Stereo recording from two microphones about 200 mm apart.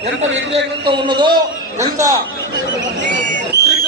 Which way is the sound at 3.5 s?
60° right (ahead or behind).